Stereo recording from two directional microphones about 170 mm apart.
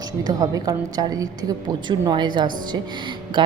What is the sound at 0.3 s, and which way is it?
A woman's voice, 20° right (ahead or behind).